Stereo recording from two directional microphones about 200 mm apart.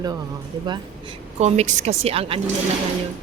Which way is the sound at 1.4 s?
35° right (ahead or behind).